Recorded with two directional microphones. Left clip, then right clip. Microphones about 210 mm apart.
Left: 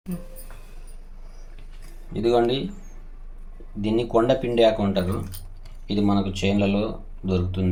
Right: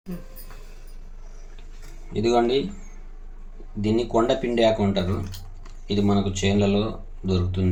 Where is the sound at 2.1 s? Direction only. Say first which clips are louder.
Even; 15° left (ahead or behind).